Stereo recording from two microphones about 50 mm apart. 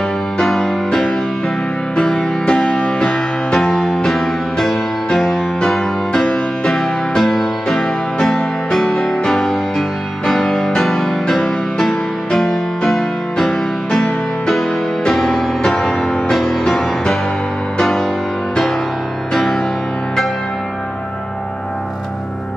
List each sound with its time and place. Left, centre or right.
0.4 s music: centre
19.3 s music: centre